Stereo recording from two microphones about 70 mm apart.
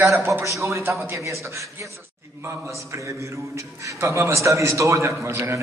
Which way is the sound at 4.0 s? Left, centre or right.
Right.